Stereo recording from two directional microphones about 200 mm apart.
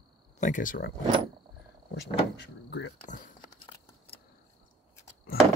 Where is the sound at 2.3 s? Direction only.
60° left (ahead or behind).